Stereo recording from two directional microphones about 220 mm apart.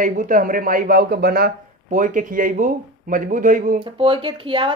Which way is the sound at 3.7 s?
25° right (ahead or behind).